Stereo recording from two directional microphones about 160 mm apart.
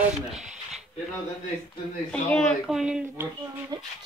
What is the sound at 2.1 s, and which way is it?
Speech, 5° left (ahead or behind).